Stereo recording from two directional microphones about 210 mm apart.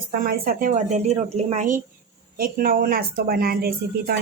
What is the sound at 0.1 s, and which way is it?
A woman's voice, 45° right (ahead or behind).